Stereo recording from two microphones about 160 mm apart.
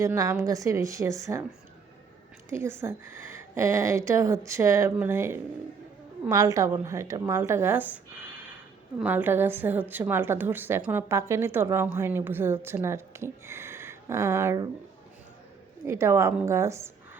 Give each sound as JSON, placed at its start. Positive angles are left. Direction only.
{"t": 0.0, "sound": "speech", "side_deg": -20}
{"t": 2.5, "sound": "speech", "side_deg": -15}
{"t": 15.9, "sound": "speech", "side_deg": -15}